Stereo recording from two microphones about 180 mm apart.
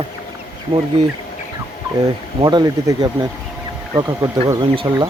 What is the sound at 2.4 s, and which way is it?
Speech, 20° right (ahead or behind).